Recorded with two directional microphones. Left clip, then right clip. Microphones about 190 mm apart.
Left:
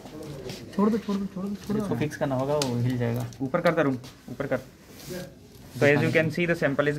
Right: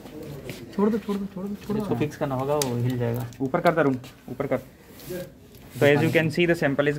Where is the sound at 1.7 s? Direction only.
20° right (ahead or behind).